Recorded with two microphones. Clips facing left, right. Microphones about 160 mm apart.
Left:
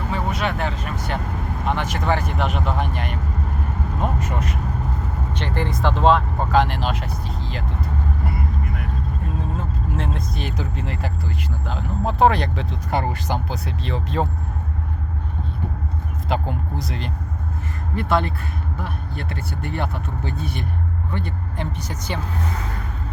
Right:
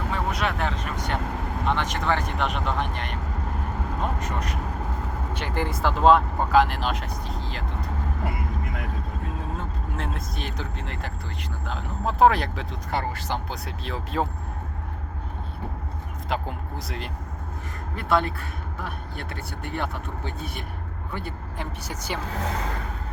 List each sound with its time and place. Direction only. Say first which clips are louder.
0.1 s speech: left 3 dB; centre (ahead or behind)
4.2 s speech: left 4 dB; 5° left (ahead or behind)
5.3 s speech: left 3 dB; 10° right (ahead or behind)
10.0 s speech: left 2 dB; centre (ahead or behind)
12.9 s speech: left 4 dB; 15° left (ahead or behind)
13.5 s speech: left 5 dB; centre (ahead or behind)
16.3 s speech: left 5 dB; centre (ahead or behind)